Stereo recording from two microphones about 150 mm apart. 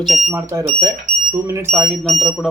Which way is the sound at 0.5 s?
25° right (ahead or behind).